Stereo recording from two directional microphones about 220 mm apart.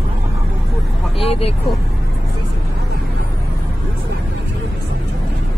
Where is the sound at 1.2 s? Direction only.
25° left (ahead or behind).